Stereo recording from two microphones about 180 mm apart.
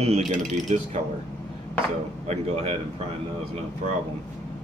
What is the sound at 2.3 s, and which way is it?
Speech, 35° right (ahead or behind).